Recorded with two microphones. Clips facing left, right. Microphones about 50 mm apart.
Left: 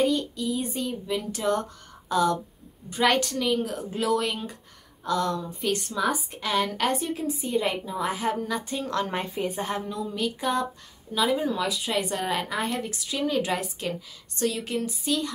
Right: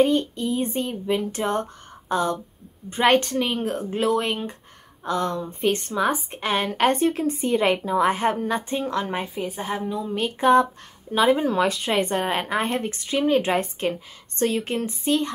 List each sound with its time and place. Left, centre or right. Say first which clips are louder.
0.2 s a woman's voice: right 4 dB; right
8.9 s a woman's voice: right 2 dB; centre
10.1 s a woman's voice: right 10 dB; right